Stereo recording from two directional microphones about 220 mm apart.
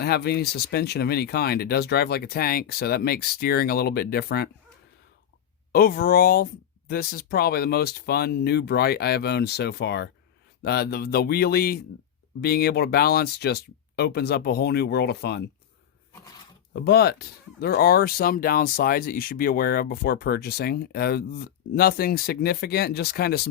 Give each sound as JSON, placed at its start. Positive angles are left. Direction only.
{"t": 0.0, "sound": "speech", "side_deg": 45}
{"t": 5.7, "sound": "speech", "side_deg": 40}
{"t": 16.7, "sound": "speech", "side_deg": 45}